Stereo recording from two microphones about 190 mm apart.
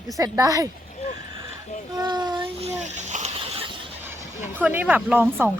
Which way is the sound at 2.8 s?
40° right (ahead or behind).